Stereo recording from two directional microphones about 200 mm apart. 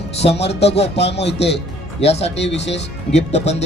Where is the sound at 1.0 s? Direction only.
60° left (ahead or behind).